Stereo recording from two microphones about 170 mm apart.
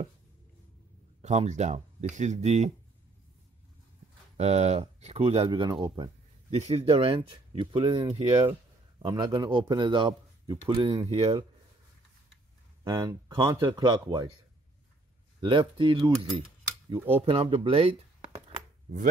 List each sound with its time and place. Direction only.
1.2 s speech: 40° right (ahead or behind)
4.4 s speech: 40° right (ahead or behind); by 6.1 s 25° right (ahead or behind)
6.5 s speech: 35° right (ahead or behind)
12.8 s speech: 20° right (ahead or behind)
15.4 s speech: 30° right (ahead or behind)